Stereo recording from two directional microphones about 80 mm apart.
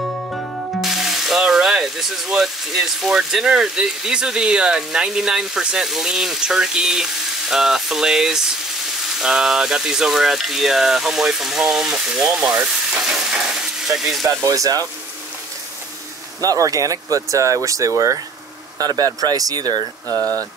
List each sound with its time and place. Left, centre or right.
0.8 s speech: centre
14.5 s speech: right
16.3 s speech: right